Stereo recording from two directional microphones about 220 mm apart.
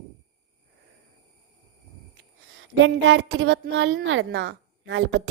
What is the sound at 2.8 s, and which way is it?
A woman's voice, 55° right (ahead or behind).